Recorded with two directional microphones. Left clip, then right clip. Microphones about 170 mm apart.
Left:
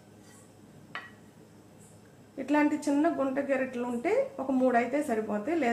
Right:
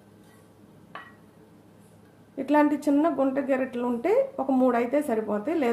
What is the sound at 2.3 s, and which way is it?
A woman's voice, 65° right (ahead or behind).